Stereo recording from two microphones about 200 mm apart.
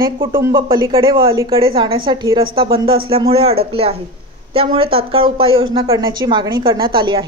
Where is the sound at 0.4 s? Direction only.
20° right (ahead or behind).